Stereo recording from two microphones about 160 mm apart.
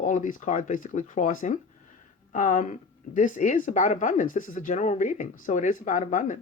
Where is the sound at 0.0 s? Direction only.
55° left (ahead or behind).